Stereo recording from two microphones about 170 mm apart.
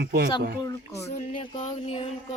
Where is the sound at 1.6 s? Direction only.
35° left (ahead or behind).